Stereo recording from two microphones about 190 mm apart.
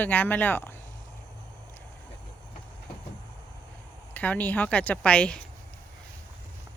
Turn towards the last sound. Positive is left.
turn(degrees=5)  # may be behind; listen again after turning